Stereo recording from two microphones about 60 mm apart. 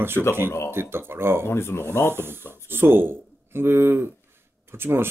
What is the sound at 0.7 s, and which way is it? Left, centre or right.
Speech, right.